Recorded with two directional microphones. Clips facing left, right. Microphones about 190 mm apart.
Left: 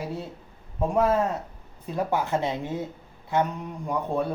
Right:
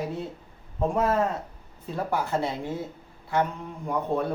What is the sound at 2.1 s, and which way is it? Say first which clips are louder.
Speech: even; 20° left (ahead or behind).